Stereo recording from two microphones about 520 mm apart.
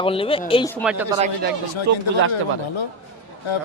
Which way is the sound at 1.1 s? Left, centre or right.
Centre.